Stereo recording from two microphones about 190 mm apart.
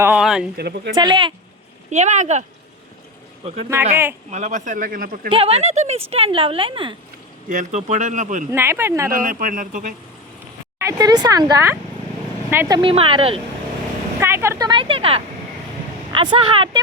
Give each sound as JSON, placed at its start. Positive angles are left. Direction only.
{"t": 0.0, "sound": "speech", "side_deg": -5}
{"t": 0.9, "sound": "speech", "side_deg": -20}
{"t": 1.9, "sound": "speech", "side_deg": -40}
{"t": 3.4, "sound": "speech", "side_deg": -35}
{"t": 5.3, "sound": "speech", "side_deg": -30}
{"t": 7.5, "sound": "speech", "side_deg": -40}
{"t": 8.4, "sound": "speech", "side_deg": -15}
{"t": 9.1, "sound": "speech", "side_deg": -45}
{"t": 10.8, "sound": "speech", "side_deg": -20}
{"t": 14.2, "sound": "vehicle", "side_deg": -15}
{"t": 14.7, "sound": "speech", "side_deg": -25}